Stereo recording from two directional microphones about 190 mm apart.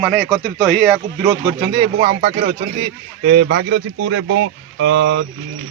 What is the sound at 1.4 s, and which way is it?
Speech, 25° right (ahead or behind).